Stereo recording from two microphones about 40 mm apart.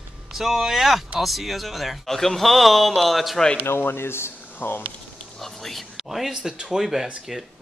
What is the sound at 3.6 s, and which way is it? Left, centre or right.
Speech, left.